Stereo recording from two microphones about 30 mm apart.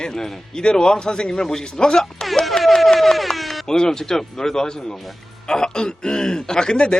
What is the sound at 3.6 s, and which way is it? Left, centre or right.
A man's voice, left.